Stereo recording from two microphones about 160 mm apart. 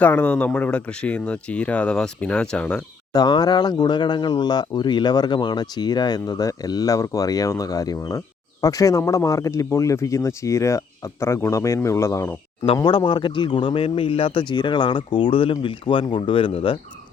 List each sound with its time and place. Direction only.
0.0 s speech: 10° left (ahead or behind)
3.1 s speech: 25° left (ahead or behind)
12.6 s speech: 30° left (ahead or behind)